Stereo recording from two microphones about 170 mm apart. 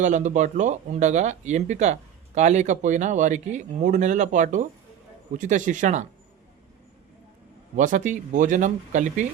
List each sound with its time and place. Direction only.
0.0 s speech: 45° right (ahead or behind)
7.8 s speech: 45° right (ahead or behind)